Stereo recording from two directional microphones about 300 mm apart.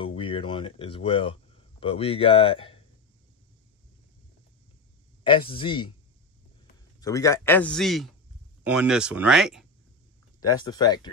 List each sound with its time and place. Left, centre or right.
0.0 s speech: centre
5.2 s a man's voice: centre
7.0 s a man's voice: centre
10.4 s a man's voice: centre